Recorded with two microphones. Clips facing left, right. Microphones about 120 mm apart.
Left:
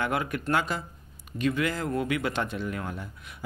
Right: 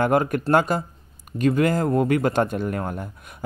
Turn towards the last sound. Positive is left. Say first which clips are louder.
# right 6 dB
turn(degrees=-50)  # may be behind; listen again after turning